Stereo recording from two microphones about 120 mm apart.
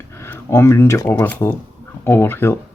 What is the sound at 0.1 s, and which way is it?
Speech, 20° left (ahead or behind).